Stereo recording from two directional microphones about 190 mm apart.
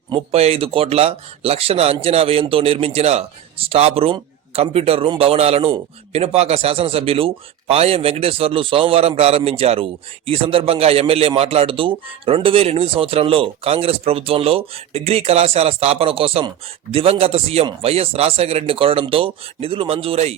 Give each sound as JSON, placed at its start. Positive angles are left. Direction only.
{"t": 0.1, "sound": "speech", "side_deg": -30}